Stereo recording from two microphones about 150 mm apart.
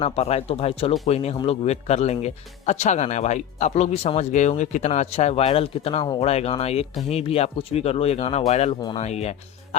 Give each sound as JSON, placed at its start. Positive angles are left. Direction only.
{"t": 0.0, "sound": "speech", "side_deg": 45}